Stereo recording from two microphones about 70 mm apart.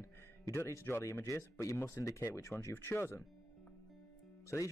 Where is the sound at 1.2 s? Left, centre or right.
Left.